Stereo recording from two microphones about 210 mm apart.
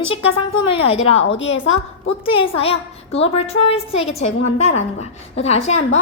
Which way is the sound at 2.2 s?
25° left (ahead or behind).